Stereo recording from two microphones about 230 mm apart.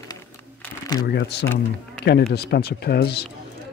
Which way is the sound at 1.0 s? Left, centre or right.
Left.